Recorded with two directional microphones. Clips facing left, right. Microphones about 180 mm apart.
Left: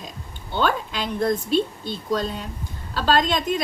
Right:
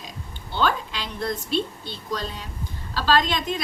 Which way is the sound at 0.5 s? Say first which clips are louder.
Left 2 dB; 50° left (ahead or behind).